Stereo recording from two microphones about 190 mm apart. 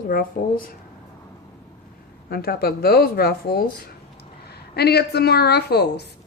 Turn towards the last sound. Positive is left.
turn(degrees=60)  # may be behind; listen again after turning